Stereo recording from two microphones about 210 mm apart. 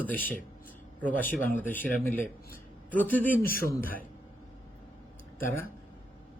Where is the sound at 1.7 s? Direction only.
10° left (ahead or behind).